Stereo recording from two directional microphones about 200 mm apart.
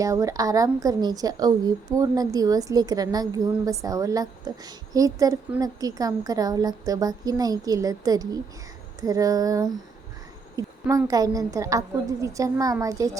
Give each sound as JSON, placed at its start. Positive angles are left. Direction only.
{"t": 0.0, "sound": "a woman's voice", "side_deg": -15}